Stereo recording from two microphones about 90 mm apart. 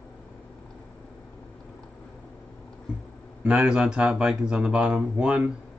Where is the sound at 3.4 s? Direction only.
10° right (ahead or behind).